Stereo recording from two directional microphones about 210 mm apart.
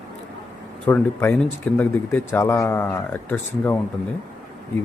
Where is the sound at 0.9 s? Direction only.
10° left (ahead or behind).